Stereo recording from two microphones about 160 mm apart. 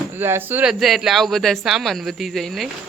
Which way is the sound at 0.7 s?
Centre (ahead or behind).